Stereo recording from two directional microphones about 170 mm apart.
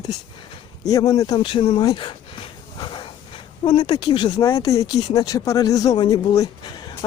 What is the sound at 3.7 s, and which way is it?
Speech, 25° left (ahead or behind).